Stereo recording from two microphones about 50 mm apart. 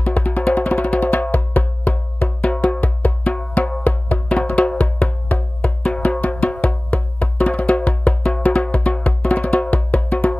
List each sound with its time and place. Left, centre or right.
0.0 s music: left
2.8 s music: left